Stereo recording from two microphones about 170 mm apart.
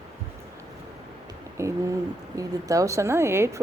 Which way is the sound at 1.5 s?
20° right (ahead or behind).